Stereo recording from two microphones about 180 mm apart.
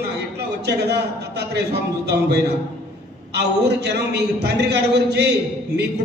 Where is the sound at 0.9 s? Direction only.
65° right (ahead or behind).